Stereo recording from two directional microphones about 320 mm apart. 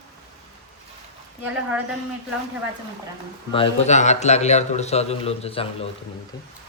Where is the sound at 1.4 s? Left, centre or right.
Centre.